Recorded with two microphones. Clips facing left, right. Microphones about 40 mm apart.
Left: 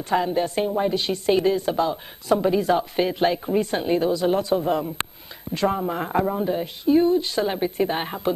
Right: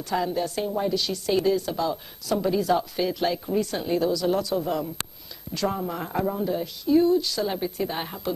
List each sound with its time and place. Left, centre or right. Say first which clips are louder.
0.1 s a woman's voice: left 4 dB; left